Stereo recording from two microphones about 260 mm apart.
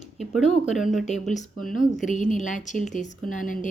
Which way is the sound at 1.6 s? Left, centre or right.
Left.